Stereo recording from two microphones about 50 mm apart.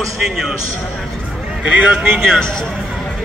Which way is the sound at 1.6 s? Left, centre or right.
Right.